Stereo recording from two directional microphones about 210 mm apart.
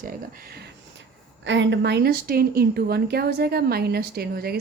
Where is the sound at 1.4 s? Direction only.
60° right (ahead or behind).